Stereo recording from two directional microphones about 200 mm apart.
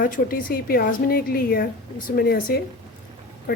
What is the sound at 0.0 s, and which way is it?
A woman's voice, 45° left (ahead or behind).